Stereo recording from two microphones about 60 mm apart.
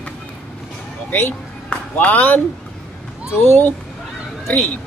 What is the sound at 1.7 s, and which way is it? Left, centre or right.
Speech, left.